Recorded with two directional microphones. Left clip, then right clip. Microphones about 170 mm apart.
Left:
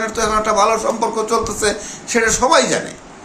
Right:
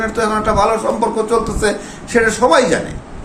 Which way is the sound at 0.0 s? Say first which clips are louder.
Right 1 dB; 15° left (ahead or behind).